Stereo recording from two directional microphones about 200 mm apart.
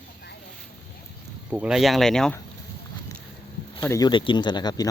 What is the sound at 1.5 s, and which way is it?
Speech, 5° right (ahead or behind).